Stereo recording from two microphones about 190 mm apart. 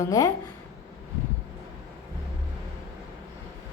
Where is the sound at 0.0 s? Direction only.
20° left (ahead or behind).